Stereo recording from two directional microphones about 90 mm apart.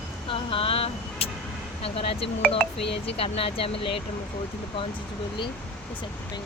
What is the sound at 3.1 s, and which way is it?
Speech, 90° left.